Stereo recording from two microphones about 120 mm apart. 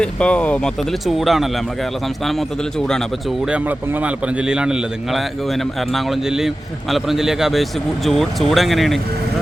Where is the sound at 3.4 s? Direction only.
10° right (ahead or behind).